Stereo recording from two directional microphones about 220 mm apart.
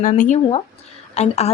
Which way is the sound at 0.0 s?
35° left (ahead or behind).